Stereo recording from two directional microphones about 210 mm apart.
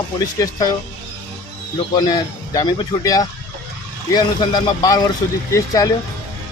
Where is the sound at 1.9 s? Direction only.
20° left (ahead or behind).